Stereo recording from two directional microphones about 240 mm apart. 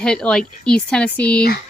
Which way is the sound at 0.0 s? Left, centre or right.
Centre.